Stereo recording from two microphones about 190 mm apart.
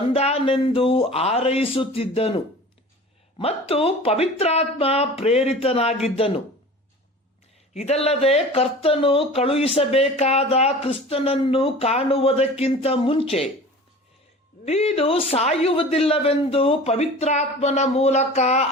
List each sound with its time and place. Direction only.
0.1 s speech: 30° left (ahead or behind)
7.7 s speech: 35° left (ahead or behind)
14.6 s speech: 35° left (ahead or behind)